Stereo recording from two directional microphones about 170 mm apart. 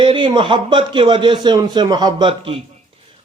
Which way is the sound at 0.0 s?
30° right (ahead or behind).